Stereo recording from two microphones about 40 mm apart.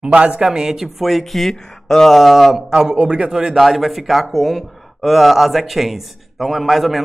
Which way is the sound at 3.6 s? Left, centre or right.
Centre.